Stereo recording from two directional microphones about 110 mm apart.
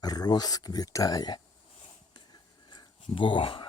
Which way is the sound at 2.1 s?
40° left (ahead or behind).